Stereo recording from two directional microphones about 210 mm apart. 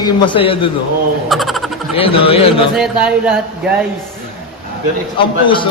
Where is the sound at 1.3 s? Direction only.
Centre (ahead or behind).